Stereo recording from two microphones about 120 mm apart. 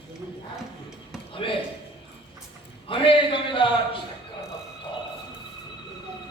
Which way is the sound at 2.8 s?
45° left (ahead or behind).